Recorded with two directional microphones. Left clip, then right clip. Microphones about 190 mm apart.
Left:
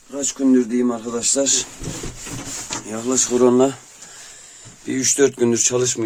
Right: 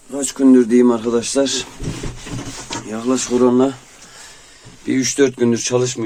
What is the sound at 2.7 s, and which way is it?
Speech, 25° left (ahead or behind).